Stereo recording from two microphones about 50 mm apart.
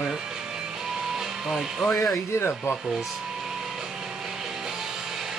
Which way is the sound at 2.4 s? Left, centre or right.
Left.